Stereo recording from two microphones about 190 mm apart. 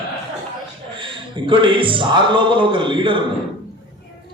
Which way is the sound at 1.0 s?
25° right (ahead or behind).